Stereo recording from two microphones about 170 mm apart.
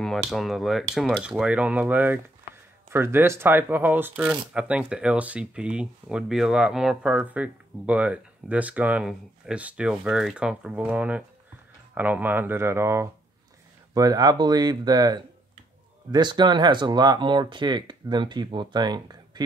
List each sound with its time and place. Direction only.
0.0 s speech: centre (ahead or behind); by 19.4 s 25° right (ahead or behind)